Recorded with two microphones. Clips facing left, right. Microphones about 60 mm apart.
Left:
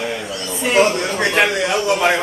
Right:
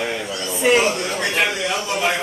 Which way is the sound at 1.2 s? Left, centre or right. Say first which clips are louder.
Left 6 dB; left.